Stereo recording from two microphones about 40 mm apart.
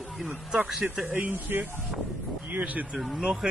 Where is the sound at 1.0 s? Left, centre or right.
Right.